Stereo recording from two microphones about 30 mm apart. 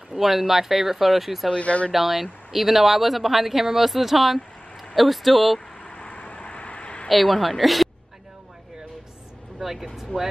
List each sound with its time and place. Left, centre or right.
0.1 s speech: centre
1.5 s speech: left
1.9 s speech: centre
5.8 s vehicle: left
7.1 s speech: centre
9.6 s speech: centre
10.1 s speech: left